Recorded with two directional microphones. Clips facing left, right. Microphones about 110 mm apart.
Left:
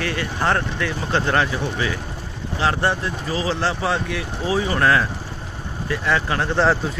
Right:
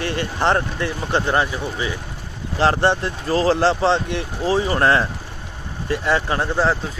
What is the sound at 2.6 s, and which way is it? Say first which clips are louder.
Speech: right 4 dB; 30° right (ahead or behind).